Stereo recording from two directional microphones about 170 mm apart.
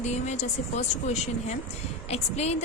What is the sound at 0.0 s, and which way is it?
A woman's voice, 40° left (ahead or behind).